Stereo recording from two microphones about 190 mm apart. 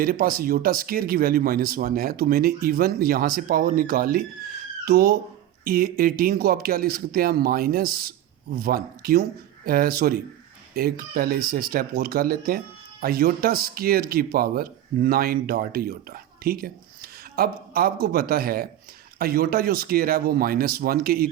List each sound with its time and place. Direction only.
0.0 s speech: 50° right (ahead or behind)